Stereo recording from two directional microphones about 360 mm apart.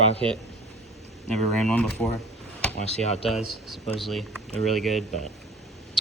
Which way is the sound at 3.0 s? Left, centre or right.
Centre.